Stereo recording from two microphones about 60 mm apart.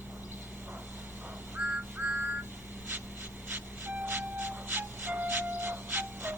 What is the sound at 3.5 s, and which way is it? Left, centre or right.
Music, right.